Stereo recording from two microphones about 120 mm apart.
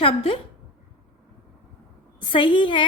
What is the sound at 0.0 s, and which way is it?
Speech, 50° left (ahead or behind).